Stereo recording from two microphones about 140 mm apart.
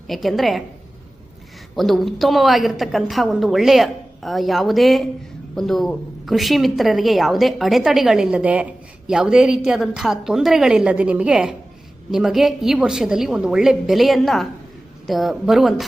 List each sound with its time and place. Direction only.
0.1 s a woman's voice: centre (ahead or behind)
1.7 s a woman's voice: centre (ahead or behind)